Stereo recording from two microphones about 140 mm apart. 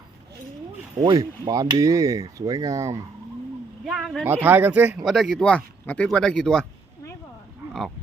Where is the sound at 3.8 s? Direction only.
5° right (ahead or behind).